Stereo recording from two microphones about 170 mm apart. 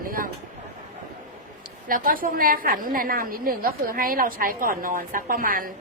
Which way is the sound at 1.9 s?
55° right (ahead or behind).